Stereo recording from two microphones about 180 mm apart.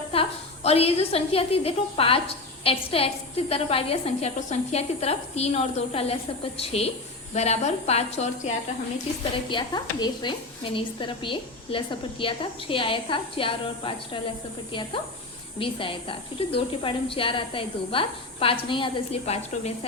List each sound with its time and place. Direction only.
0.1 s a woman's voice: 35° left (ahead or behind)
9.5 s a woman's voice: 25° left (ahead or behind)
15.5 s a woman's voice: 30° left (ahead or behind)